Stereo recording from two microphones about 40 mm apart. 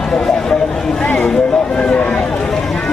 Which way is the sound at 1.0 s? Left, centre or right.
Left.